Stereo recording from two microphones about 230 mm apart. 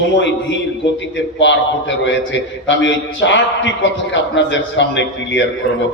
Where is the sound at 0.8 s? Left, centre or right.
Left.